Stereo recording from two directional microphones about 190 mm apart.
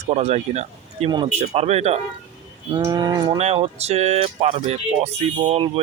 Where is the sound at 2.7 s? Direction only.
20° right (ahead or behind).